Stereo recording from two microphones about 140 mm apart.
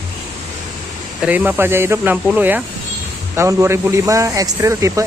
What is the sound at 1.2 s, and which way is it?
A man's voice, 10° right (ahead or behind).